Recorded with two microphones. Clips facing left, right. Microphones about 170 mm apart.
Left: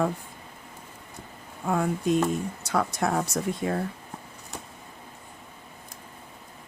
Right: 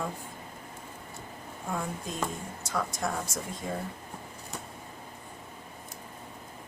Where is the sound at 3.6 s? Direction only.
85° left.